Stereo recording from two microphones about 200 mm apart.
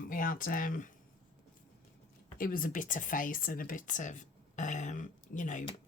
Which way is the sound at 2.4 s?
45° left (ahead or behind).